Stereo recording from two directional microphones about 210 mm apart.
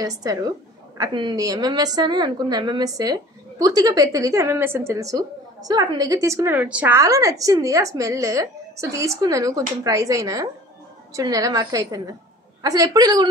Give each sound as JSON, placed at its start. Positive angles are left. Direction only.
{"t": 0.0, "sound": "a woman's voice", "side_deg": -15}